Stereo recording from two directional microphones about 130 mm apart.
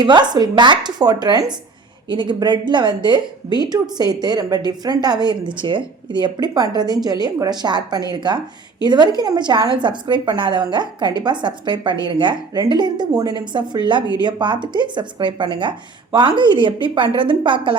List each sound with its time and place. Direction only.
0.0 s speech: 35° right (ahead or behind)